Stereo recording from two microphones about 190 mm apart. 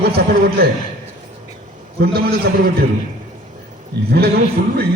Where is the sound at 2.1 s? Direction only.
55° right (ahead or behind).